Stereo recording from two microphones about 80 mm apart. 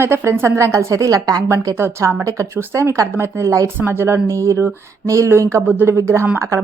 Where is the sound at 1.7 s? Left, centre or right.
Right.